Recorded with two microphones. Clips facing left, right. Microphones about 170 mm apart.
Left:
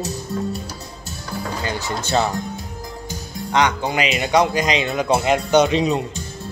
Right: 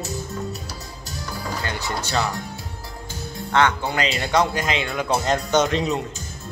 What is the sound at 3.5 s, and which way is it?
A man's voice, 15° left (ahead or behind).